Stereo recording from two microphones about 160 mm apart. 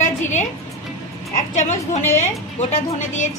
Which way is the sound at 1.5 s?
50° left (ahead or behind).